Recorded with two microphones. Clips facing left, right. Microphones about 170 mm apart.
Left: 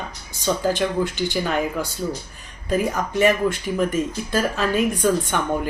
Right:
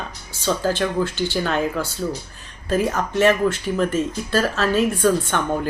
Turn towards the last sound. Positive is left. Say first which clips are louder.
# right 1 dB
turn(degrees=10)  # may be behind; listen again after turning